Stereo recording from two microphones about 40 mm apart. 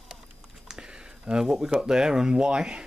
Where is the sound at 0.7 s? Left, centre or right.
Right.